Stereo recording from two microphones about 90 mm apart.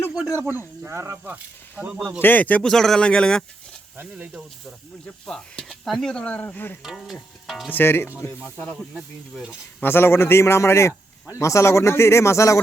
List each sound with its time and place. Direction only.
0.1 s speech: 5° right (ahead or behind)
0.9 s speech: 30° right (ahead or behind)
1.8 s speech: 15° right (ahead or behind)
2.2 s speech: 20° left (ahead or behind)
2.6 s speech: 5° left (ahead or behind)
3.9 s speech: 15° right (ahead or behind)
5.0 s speech: 10° left (ahead or behind)
6.4 s a man's voice: 20° left (ahead or behind)
6.8 s speech: centre (ahead or behind)
7.7 s a man's voice: 25° left (ahead or behind)
8.9 s speech: 5° right (ahead or behind)
9.8 s a man's voice: 25° left (ahead or behind)